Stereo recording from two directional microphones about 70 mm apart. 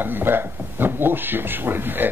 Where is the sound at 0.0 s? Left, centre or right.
Right.